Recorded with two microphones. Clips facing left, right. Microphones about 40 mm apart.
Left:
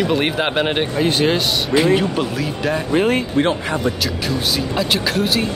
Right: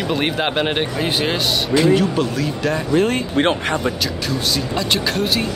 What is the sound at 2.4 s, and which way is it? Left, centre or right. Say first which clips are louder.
Speech: even; centre.